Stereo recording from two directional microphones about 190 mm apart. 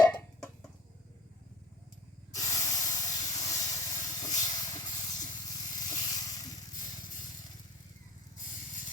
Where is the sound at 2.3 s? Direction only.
20° left (ahead or behind).